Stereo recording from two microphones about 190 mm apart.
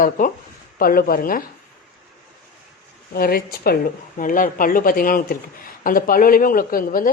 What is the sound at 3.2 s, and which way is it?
Speech, 50° left (ahead or behind).